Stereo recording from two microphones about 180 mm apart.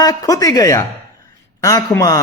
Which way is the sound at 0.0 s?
20° left (ahead or behind).